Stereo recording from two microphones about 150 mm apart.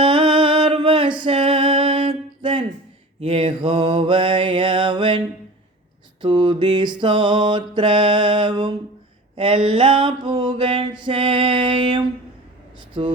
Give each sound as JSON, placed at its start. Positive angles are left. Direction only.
{"t": 0.0, "sound": "music", "side_deg": -35}
{"t": 3.2, "sound": "mantra", "side_deg": -40}
{"t": 6.2, "sound": "mantra", "side_deg": -30}
{"t": 9.3, "sound": "a sound", "side_deg": -35}
{"t": 11.0, "sound": "music", "side_deg": -35}
{"t": 12.9, "sound": "speech", "side_deg": -35}